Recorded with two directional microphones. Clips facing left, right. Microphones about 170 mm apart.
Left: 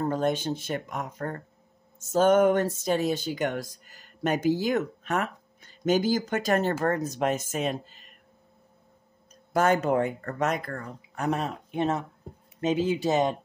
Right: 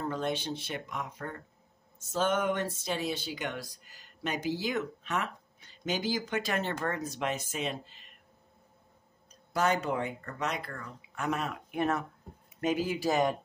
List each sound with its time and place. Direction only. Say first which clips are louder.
0.0 s speech: left 7 dB; 45° left (ahead or behind)
9.3 s speech: left 6 dB; 50° left (ahead or behind); by 13.4 s 25° left (ahead or behind)